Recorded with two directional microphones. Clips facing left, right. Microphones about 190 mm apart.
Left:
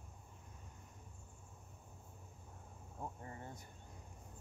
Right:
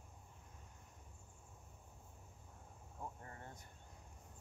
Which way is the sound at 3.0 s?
15° left (ahead or behind).